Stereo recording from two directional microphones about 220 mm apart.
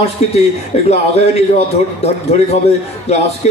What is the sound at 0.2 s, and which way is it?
A man's voice, 30° left (ahead or behind).